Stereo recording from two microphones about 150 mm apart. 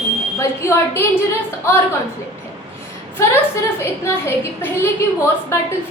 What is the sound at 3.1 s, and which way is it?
A woman's voice, 15° left (ahead or behind).